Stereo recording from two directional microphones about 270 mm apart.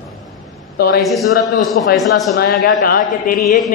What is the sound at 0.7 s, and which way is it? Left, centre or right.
A man's voice, left.